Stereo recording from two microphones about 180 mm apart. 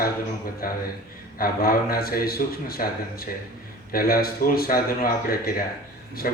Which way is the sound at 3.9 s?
55° left (ahead or behind).